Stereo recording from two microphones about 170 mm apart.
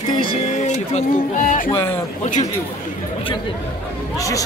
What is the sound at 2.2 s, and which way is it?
Speech, 45° left (ahead or behind).